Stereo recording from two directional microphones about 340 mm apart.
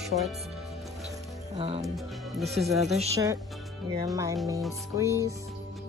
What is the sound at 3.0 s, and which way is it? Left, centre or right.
Music, centre.